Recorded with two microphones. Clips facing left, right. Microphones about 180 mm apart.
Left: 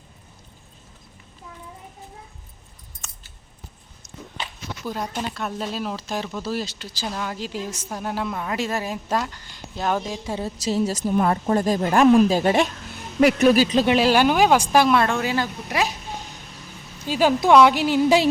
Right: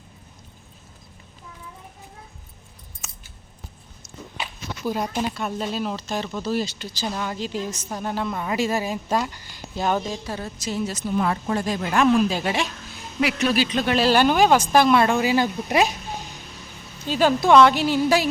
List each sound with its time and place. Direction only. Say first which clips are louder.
3.0 s scissors: right 1 dB; 5° right (ahead or behind)
4.9 s speech: right 4 dB; 10° right (ahead or behind)
10.2 s a sound: left 3 dB; 25° left (ahead or behind)
10.7 s speech: left 4 dB; 40° left (ahead or behind)
13.8 s speech: left 1 dB; 15° left (ahead or behind)
14.9 s speech: right 2 dB; 5° right (ahead or behind)
15.4 s speech: right 4 dB; 15° right (ahead or behind)
17.1 s speech: even; 10° left (ahead or behind)